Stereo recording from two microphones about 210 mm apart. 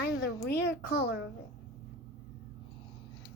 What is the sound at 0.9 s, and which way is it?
Speech, 50° left (ahead or behind).